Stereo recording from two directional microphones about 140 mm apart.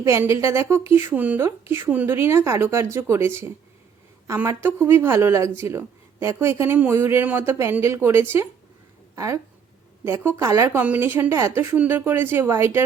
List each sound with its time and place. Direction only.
0.0 s a woman's voice: 20° right (ahead or behind)